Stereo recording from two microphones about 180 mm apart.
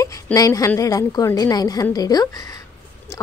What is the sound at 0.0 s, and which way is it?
A woman's voice, 20° left (ahead or behind).